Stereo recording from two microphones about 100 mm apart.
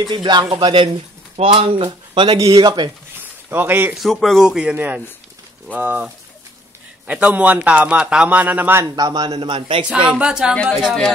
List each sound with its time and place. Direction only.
0.1 s a man's voice: 50° right (ahead or behind)
3.4 s speech: 20° right (ahead or behind)
3.9 s a man's voice: centre (ahead or behind); by 8.9 s 25° right (ahead or behind)
8.9 s a man's voice: 45° right (ahead or behind)
10.1 s a man's voice: 10° right (ahead or behind)